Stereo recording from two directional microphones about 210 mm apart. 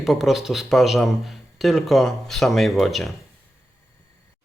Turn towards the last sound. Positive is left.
turn(degrees=0)  # may be behind; listen again after turning